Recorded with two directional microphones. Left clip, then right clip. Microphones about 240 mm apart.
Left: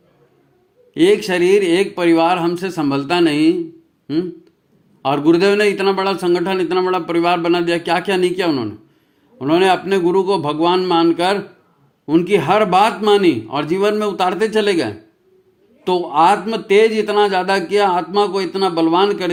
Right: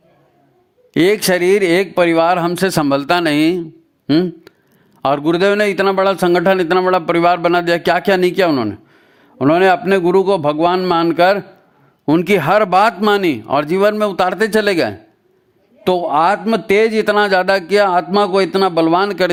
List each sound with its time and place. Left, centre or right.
0.9 s speech: right